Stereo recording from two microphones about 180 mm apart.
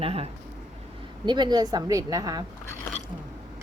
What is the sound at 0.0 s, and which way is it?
A woman's voice, 35° right (ahead or behind).